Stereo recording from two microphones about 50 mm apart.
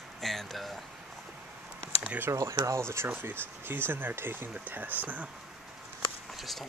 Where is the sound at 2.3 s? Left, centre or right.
Right.